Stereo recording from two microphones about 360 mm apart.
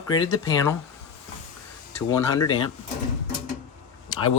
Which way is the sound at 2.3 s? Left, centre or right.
Centre.